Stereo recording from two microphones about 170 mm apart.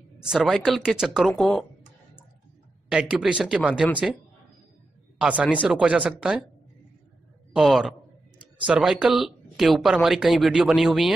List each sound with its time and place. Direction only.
0.2 s speech: centre (ahead or behind)
2.9 s speech: 5° right (ahead or behind)
5.2 s speech: 5° right (ahead or behind)
7.5 s speech: centre (ahead or behind)